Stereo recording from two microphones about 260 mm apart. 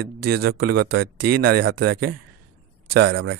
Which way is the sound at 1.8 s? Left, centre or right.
Right.